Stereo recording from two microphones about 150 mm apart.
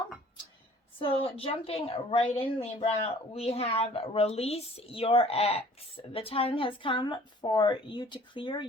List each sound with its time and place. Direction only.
0.9 s a woman's voice: 35° left (ahead or behind)